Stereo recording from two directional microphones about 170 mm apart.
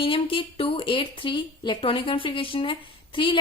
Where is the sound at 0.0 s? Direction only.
30° left (ahead or behind).